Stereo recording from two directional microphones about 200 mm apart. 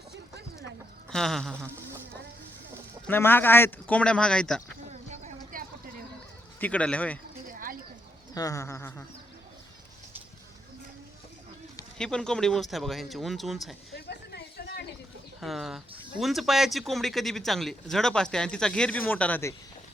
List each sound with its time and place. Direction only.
1.1 s speech: centre (ahead or behind)
1.5 s speech: 15° right (ahead or behind)
3.1 s speech: 10° left (ahead or behind)
4.9 s a sound: 35° right (ahead or behind)
5.5 s vehicle: 45° right (ahead or behind)
6.6 s speech: 5° left (ahead or behind)
7.4 s a sound: 45° right (ahead or behind)
8.4 s speech: 15° left (ahead or behind)
11.9 s speech: 5° left (ahead or behind)
13.9 s a sound: 55° left (ahead or behind)
15.4 s speech: centre (ahead or behind)